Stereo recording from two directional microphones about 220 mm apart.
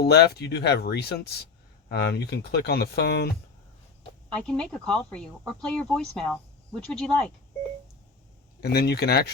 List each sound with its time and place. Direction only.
0.0 s speech: 45° left (ahead or behind)
4.3 s speech: 5° left (ahead or behind)
8.6 s speech: 45° left (ahead or behind)